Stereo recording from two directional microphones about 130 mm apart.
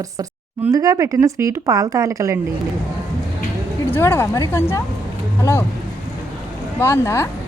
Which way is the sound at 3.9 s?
20° left (ahead or behind).